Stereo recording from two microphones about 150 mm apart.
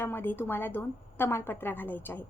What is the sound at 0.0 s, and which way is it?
A woman's voice, 15° left (ahead or behind).